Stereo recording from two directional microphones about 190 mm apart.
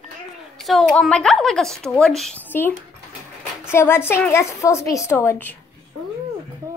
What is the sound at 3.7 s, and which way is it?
A woman's voice, 15° left (ahead or behind).